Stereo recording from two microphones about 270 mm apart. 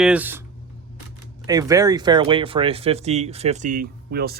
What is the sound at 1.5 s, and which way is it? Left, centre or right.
Speech, centre.